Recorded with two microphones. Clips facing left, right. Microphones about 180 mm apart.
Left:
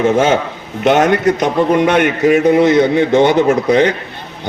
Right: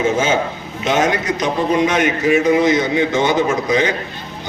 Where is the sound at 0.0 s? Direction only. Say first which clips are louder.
Left 4 dB; 65° left (ahead or behind).